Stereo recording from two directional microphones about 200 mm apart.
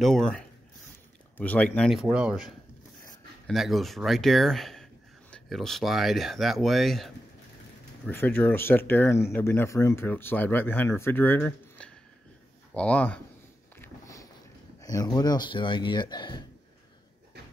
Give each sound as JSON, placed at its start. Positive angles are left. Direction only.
{"t": 0.0, "sound": "speech", "side_deg": 5}
{"t": 8.1, "sound": "speech", "side_deg": 10}
{"t": 13.7, "sound": "a sound", "side_deg": 15}
{"t": 14.8, "sound": "speech", "side_deg": 15}